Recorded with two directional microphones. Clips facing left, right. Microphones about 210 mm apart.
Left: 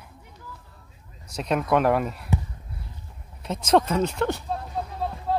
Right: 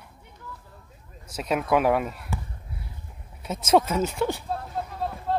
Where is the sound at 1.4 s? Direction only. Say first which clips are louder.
Left 1 dB; 5° right (ahead or behind).